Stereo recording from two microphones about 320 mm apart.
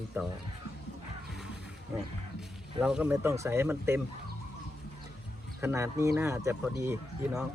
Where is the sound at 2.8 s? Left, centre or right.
Centre.